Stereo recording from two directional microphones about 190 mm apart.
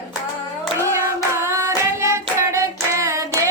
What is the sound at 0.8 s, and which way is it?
Hands, 15° right (ahead or behind).